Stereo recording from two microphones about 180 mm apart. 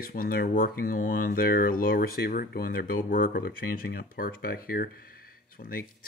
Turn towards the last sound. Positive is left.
turn(degrees=55)  # may be behind; listen again after turning